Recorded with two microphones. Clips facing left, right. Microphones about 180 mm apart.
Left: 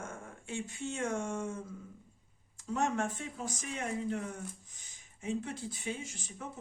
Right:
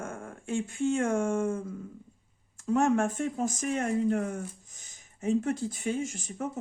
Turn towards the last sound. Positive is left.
turn(degrees=-45)  # may be behind; listen again after turning